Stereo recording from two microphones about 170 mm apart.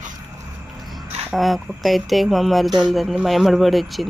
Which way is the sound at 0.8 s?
Centre (ahead or behind).